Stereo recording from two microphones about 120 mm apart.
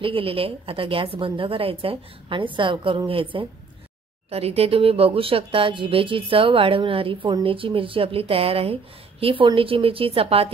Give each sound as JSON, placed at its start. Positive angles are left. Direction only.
{"t": 0.0, "sound": "speech", "side_deg": -50}
{"t": 4.3, "sound": "speech", "side_deg": -55}